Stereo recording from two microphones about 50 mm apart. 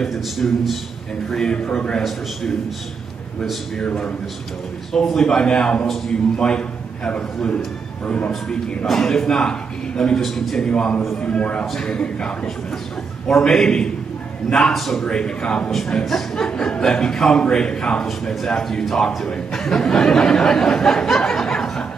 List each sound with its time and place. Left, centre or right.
0.0 s a man's voice: centre
1.3 s a man's voice: centre
3.8 s a man's voice: centre
8.8 s a man's voice: centre
10.2 s a man's voice: centre
10.7 s a man's voice: left
11.6 s a man's voice: centre
13.3 s a man's voice: centre
15.0 s a man's voice: centre
15.9 s a man's voice: centre
18.3 s a man's voice: centre